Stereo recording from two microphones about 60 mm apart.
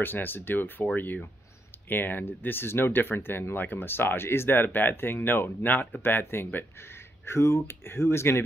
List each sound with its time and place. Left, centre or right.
0.0 s speech: left
7.2 s speech: left